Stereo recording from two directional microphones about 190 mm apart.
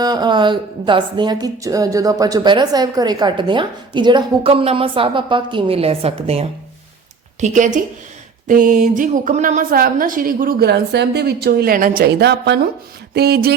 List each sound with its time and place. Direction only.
0.0 s a woman's voice: 20° right (ahead or behind); by 13.6 s 55° right (ahead or behind)